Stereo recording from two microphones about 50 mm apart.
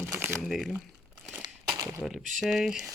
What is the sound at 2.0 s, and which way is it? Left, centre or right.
Speech, centre.